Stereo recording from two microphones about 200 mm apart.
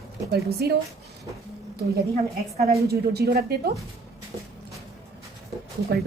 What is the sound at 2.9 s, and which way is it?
Speech, 55° right (ahead or behind).